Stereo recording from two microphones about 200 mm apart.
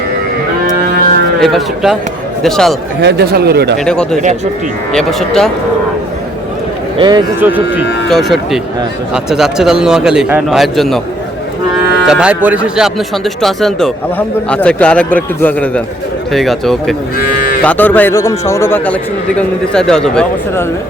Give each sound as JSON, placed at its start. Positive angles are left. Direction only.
{"t": 1.4, "sound": "speech", "side_deg": 0}
{"t": 3.0, "sound": "speech", "side_deg": -55}
{"t": 3.8, "sound": "speech", "side_deg": 5}
{"t": 7.3, "sound": "speech", "side_deg": -10}
{"t": 12.0, "sound": "a man's voice", "side_deg": -5}